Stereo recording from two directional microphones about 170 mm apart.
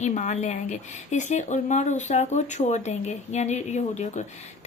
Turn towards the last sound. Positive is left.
turn(degrees=45)  # may be behind; listen again after turning